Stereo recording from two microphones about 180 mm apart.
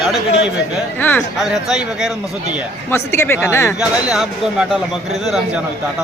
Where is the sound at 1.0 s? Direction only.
10° left (ahead or behind).